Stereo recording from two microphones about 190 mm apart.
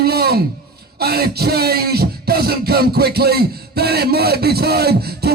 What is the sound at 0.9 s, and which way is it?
Beatboxing, 55° right (ahead or behind).